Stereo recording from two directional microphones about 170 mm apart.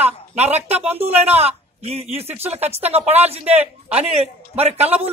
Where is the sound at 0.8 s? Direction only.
40° right (ahead or behind).